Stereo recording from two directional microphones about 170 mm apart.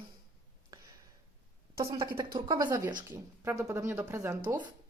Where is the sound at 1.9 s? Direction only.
25° right (ahead or behind).